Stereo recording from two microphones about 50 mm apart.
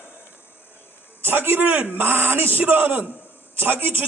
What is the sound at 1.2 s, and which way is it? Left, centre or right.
A man's voice, right.